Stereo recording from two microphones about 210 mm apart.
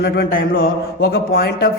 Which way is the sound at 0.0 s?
50° left (ahead or behind).